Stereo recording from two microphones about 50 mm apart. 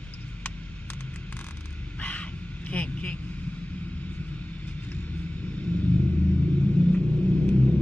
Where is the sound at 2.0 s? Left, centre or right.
Left.